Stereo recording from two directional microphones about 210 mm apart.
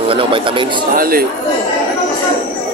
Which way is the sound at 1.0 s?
45° right (ahead or behind).